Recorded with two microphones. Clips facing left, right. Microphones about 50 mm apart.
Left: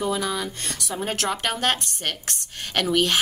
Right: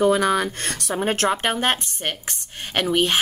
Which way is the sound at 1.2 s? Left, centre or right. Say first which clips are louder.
Right 2 dB; right.